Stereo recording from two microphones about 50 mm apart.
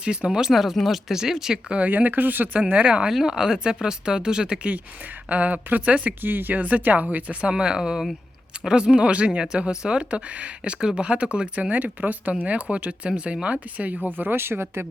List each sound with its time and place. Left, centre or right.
0.0 s speech: centre
0.5 s speech: centre
1.7 s speech: right
3.1 s speech: centre
5.3 s speech: right
7.5 s speech: centre
11.7 s speech: right
14.2 s speech: right